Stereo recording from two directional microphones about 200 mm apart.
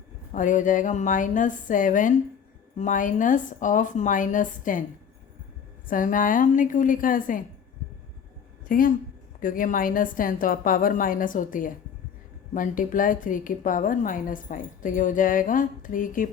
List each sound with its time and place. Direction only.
0.3 s a woman's voice: 40° left (ahead or behind)
5.9 s a woman's voice: 40° left (ahead or behind)
8.6 s a woman's voice: 45° left (ahead or behind)